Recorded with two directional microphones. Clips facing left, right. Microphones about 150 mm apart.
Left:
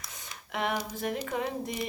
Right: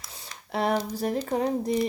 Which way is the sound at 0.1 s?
35° right (ahead or behind).